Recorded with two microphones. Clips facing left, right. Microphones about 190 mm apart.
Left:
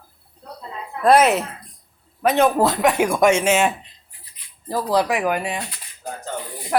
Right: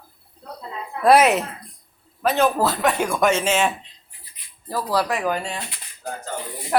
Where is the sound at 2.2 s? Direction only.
15° left (ahead or behind).